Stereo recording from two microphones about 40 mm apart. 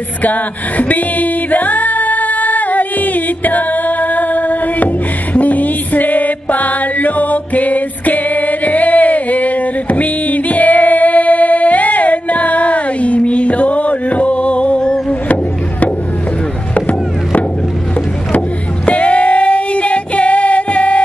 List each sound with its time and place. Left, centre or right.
0.2 s music: left
16.7 s chop: left
18.9 s female singing: left